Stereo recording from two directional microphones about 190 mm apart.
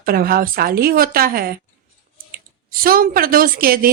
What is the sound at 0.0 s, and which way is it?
A woman's voice, 50° right (ahead or behind).